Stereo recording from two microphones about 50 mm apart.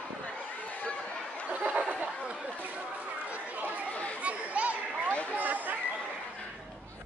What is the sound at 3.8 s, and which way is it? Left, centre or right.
Chatter, left.